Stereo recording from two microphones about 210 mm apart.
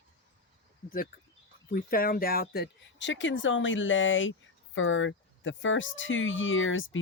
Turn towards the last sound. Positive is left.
turn(degrees=65)  # may be behind; listen again after turning